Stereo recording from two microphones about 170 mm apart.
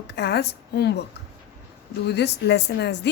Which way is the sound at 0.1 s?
75° left (ahead or behind).